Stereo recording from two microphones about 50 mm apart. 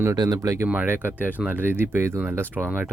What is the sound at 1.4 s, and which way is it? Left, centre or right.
Speech, right.